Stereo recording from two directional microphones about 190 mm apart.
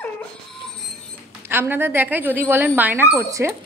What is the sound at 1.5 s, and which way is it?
Speech, 10° right (ahead or behind).